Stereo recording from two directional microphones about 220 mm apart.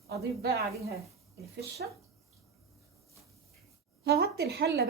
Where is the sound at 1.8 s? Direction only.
45° right (ahead or behind).